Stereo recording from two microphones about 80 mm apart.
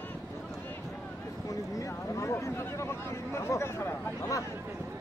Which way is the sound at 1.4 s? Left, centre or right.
Left.